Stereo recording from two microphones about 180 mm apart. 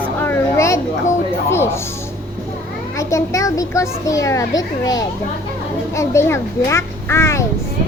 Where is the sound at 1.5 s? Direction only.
15° left (ahead or behind).